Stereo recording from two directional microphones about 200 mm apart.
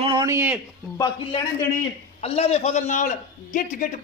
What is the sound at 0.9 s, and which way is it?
A man's voice, 25° left (ahead or behind).